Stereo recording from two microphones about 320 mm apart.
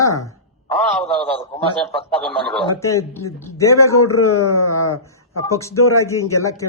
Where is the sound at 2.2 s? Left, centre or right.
Centre.